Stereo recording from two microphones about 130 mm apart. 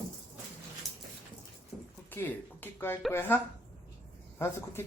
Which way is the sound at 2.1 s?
15° left (ahead or behind).